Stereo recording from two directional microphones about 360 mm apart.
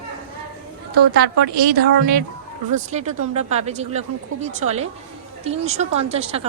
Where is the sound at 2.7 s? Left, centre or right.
Centre.